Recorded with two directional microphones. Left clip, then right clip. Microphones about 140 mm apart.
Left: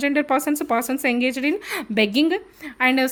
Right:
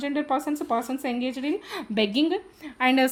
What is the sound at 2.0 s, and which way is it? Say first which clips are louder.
Speech: left 4 dB; 35° left (ahead or behind).